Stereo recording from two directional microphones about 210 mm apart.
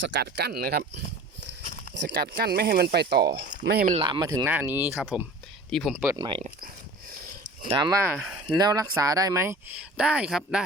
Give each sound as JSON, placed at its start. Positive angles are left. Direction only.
{"t": 0.0, "sound": "speech", "side_deg": -55}
{"t": 2.0, "sound": "speech", "side_deg": -40}
{"t": 3.9, "sound": "speech", "side_deg": -20}
{"t": 6.1, "sound": "speech", "side_deg": -25}
{"t": 7.7, "sound": "speech", "side_deg": -20}